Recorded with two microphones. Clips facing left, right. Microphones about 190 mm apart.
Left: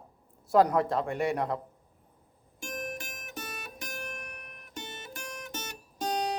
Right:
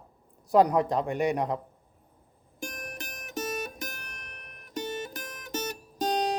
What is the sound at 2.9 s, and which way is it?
Music, 40° right (ahead or behind).